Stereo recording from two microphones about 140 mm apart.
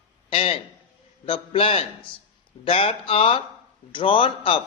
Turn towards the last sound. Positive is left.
turn(degrees=40)  # may be behind; listen again after turning